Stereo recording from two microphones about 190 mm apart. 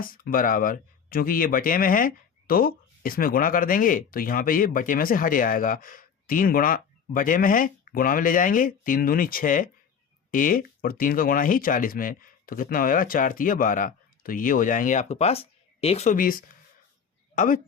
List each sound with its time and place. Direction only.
0.0 s speech: 50° left (ahead or behind)